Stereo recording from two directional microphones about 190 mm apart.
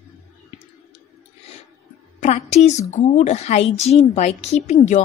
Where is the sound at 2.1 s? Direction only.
35° left (ahead or behind).